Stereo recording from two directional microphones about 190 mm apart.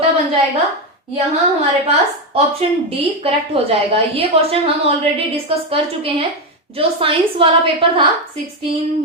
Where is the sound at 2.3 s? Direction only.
30° right (ahead or behind).